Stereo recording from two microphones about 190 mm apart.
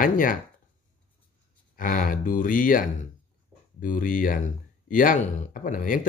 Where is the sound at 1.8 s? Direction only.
45° left (ahead or behind).